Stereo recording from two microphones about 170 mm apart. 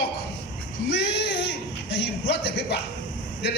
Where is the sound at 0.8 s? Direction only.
80° left.